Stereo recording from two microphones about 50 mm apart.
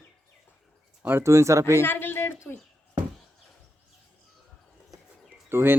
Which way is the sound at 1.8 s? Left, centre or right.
Left.